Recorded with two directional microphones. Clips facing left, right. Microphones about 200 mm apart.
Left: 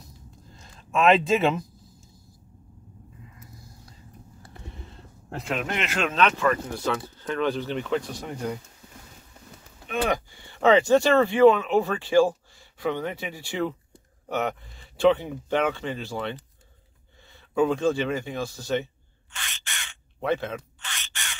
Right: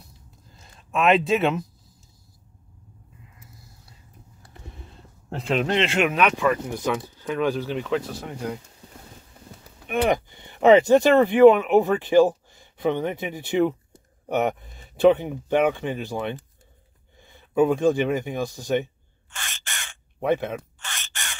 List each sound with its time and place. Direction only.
0.5 s speech: centre (ahead or behind)
5.3 s speech: 30° right (ahead or behind)
6.0 s speech: 15° right (ahead or behind)
9.8 s speech: 20° right (ahead or behind)
19.3 s crow: 45° right (ahead or behind)
20.2 s speech: 15° right (ahead or behind)
20.8 s crow: 45° right (ahead or behind)